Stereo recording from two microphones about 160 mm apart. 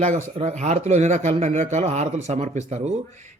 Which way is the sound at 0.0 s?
45° right (ahead or behind).